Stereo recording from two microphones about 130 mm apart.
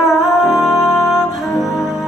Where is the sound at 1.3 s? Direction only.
Centre (ahead or behind).